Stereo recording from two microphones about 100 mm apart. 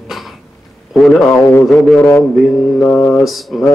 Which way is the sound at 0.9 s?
Centre (ahead or behind).